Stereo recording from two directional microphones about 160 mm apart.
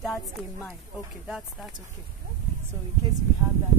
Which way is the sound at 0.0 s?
5° left (ahead or behind).